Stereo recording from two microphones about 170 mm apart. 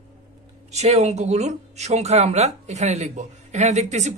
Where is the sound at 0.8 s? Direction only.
40° right (ahead or behind).